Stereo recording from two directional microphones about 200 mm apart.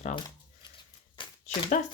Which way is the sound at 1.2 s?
25° left (ahead or behind).